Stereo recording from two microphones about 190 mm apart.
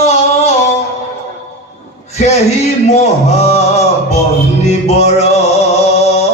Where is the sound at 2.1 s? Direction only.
35° left (ahead or behind).